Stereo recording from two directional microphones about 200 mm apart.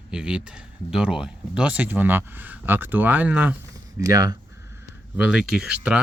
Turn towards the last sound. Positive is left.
turn(degrees=-5)  # may be behind; listen again after turning